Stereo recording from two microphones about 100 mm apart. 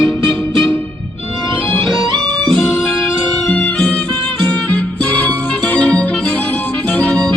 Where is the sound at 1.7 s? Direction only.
10° left (ahead or behind).